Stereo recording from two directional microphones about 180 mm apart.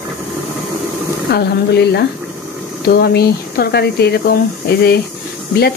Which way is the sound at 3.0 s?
60° left (ahead or behind).